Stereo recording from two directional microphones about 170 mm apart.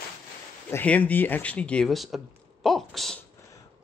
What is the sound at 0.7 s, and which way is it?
Speech, 10° left (ahead or behind).